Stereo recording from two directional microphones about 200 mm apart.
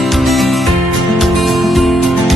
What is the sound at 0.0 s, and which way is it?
Music, centre (ahead or behind).